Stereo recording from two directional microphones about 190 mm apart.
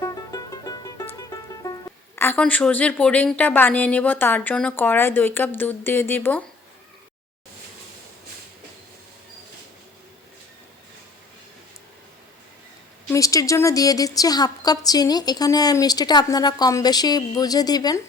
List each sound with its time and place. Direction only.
0.0 s music: 20° left (ahead or behind)
2.1 s a woman's voice: 10° left (ahead or behind)
13.1 s speech: 15° left (ahead or behind)